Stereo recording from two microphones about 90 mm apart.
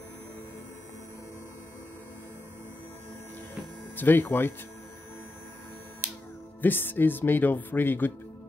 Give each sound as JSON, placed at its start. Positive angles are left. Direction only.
{"t": 3.9, "sound": "speech", "side_deg": 20}
{"t": 6.6, "sound": "speech", "side_deg": 20}